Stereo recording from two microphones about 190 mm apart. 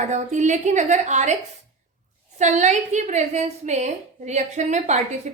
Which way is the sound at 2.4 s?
40° right (ahead or behind).